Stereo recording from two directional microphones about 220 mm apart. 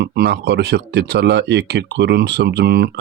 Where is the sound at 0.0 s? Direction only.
50° right (ahead or behind).